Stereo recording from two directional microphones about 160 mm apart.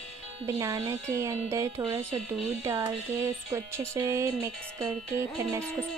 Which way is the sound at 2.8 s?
20° right (ahead or behind).